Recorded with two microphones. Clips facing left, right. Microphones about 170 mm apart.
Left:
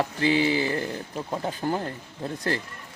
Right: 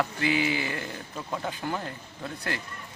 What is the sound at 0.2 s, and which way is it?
Speech, 35° left (ahead or behind).